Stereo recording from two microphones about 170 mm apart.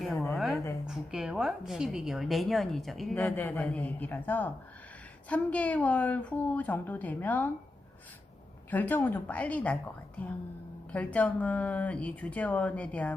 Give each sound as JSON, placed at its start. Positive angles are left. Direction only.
{"t": 0.3, "sound": "a sound", "side_deg": 0}
{"t": 0.9, "sound": "a woman's voice", "side_deg": -5}
{"t": 8.7, "sound": "speech", "side_deg": 10}
{"t": 10.9, "sound": "speech", "side_deg": 10}